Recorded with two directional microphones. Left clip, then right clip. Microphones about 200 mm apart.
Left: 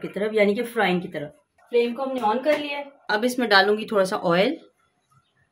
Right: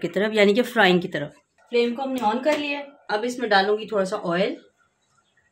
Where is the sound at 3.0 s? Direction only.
55° left (ahead or behind).